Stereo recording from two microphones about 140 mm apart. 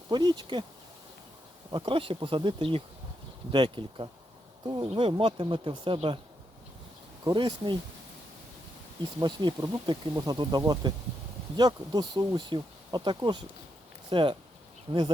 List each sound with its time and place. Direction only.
0.1 s speech: 30° right (ahead or behind)
1.7 s speech: 40° right (ahead or behind)
7.3 s speech: 30° right (ahead or behind)
9.2 s speech: 35° right (ahead or behind)